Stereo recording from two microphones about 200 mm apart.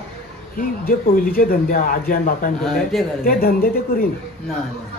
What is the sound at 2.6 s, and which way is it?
Speech, centre (ahead or behind).